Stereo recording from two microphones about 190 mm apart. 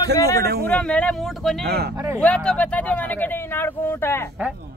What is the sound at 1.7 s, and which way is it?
Speech, 55° right (ahead or behind).